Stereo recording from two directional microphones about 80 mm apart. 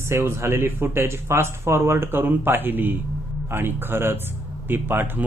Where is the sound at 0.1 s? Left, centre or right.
Right.